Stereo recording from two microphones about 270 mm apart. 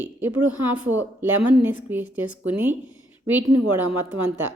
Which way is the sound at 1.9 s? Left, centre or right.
Centre.